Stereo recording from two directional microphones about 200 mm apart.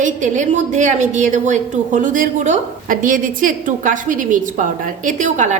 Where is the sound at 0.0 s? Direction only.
40° right (ahead or behind).